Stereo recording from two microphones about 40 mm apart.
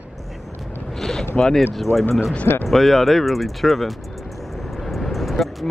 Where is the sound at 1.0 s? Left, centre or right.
Centre.